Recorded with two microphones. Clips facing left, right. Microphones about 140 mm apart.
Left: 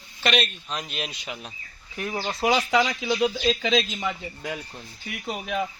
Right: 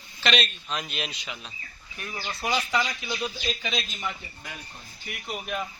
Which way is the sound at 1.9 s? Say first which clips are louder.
Left 7 dB; 85° left.